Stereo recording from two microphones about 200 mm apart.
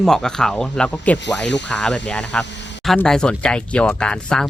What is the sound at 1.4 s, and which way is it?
Speech, 60° left (ahead or behind).